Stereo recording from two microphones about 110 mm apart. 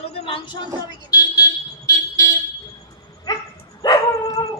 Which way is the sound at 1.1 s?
35° left (ahead or behind).